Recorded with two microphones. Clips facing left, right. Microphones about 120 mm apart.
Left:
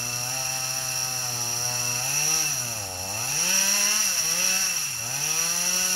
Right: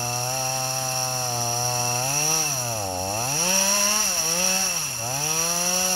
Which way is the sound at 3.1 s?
20° right (ahead or behind).